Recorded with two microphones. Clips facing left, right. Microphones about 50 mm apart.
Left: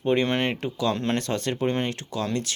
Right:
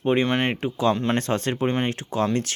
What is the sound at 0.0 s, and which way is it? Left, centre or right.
Speech, centre.